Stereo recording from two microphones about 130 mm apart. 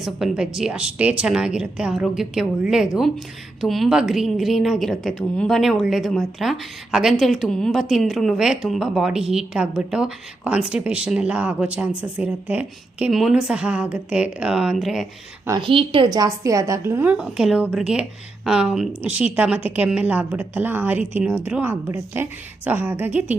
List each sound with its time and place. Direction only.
0.0 s a woman's voice: centre (ahead or behind)
15.6 s a woman's voice: 40° right (ahead or behind)
16.1 s a woman's voice: 25° right (ahead or behind)